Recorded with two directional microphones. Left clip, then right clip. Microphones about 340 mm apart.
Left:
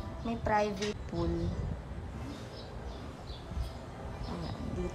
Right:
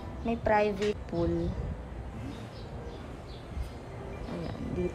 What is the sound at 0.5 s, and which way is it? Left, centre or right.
Speech, left.